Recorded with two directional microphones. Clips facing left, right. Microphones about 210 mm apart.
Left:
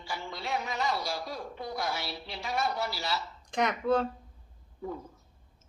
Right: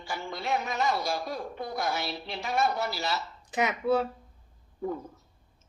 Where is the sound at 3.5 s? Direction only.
5° right (ahead or behind).